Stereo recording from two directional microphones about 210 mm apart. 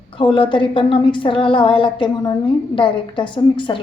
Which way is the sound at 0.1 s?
25° left (ahead or behind).